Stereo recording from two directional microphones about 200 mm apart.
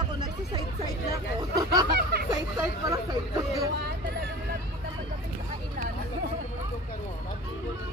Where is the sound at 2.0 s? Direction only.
50° right (ahead or behind).